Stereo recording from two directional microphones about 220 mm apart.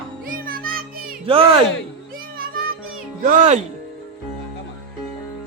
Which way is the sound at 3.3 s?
35° right (ahead or behind).